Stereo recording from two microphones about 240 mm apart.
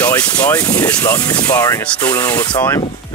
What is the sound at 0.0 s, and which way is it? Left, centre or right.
Speech, centre.